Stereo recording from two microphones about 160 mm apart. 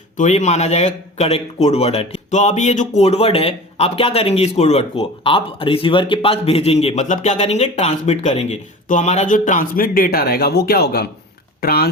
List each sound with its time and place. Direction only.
0.2 s speech: 45° left (ahead or behind); by 11.9 s 75° left (ahead or behind)